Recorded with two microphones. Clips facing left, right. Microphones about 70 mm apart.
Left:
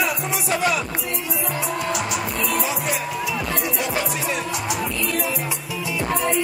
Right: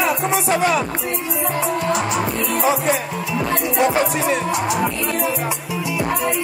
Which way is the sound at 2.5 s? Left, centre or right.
Right.